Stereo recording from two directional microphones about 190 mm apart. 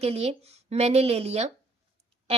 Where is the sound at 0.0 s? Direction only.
35° right (ahead or behind).